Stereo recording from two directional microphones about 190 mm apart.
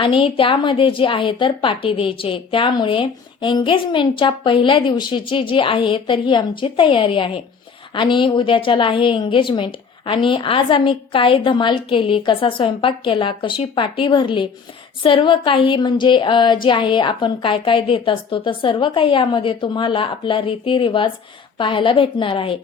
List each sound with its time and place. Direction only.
0.0 s a woman's voice: 25° left (ahead or behind)